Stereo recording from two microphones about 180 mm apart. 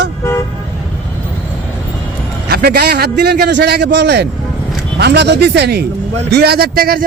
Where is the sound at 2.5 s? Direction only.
60° right (ahead or behind).